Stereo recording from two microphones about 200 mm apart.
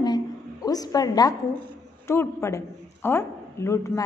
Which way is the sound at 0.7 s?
20° left (ahead or behind).